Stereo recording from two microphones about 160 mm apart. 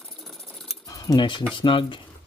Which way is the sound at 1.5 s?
30° left (ahead or behind).